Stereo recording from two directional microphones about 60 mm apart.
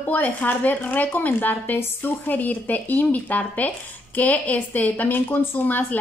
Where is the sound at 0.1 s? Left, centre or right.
Left.